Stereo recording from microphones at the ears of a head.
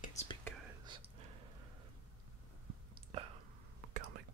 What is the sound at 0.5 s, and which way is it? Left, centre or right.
Whispering, right.